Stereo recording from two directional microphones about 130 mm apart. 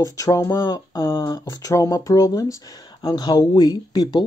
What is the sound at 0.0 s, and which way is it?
Speech, 25° left (ahead or behind).